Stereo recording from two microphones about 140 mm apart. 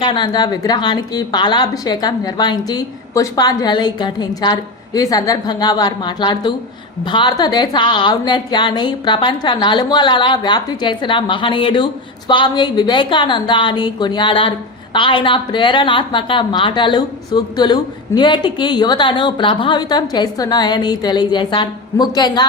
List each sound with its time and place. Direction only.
0.0 s a woman's voice: 30° left (ahead or behind)